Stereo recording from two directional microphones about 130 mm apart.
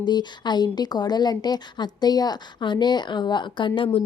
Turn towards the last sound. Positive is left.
turn(degrees=40)  # may be behind; listen again after turning